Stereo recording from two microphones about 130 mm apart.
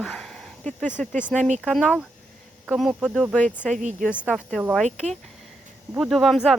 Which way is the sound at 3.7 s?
70° right (ahead or behind).